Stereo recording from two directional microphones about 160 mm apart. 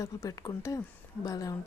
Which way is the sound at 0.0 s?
20° left (ahead or behind).